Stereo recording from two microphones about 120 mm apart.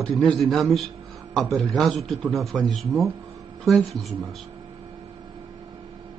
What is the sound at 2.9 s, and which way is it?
Speech, 30° right (ahead or behind).